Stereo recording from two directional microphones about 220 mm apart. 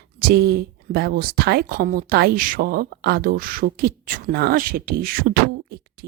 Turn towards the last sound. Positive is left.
turn(degrees=-45)  # may be behind; listen again after turning